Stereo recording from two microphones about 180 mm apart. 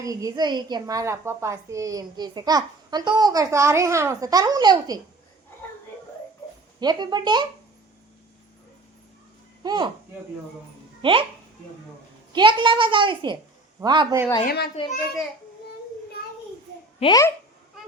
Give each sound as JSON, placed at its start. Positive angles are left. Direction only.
{"t": 0.0, "sound": "a woman's voice", "side_deg": -20}
{"t": 6.7, "sound": "a woman's voice", "side_deg": -25}
{"t": 9.6, "sound": "a woman's voice", "side_deg": -25}
{"t": 11.0, "sound": "a child's voice", "side_deg": -30}
{"t": 12.3, "sound": "a woman's voice", "side_deg": -25}
{"t": 14.4, "sound": "a child's voice", "side_deg": 65}
{"t": 17.0, "sound": "a child's voice", "side_deg": 20}